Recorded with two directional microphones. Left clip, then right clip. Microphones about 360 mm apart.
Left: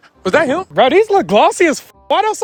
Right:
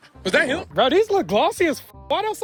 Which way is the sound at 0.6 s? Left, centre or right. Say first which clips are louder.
Left 7 dB; left.